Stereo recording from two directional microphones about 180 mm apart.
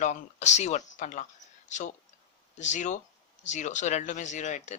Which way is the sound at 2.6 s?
40° left (ahead or behind).